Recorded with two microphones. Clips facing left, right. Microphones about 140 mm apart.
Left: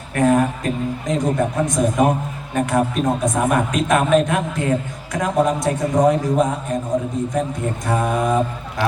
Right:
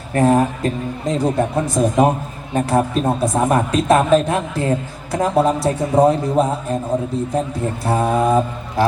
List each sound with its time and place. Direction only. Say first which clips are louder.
0.1 s a man's voice: right 1 dB; 35° right (ahead or behind)
7.9 s a man's voice: right 3 dB; 30° right (ahead or behind)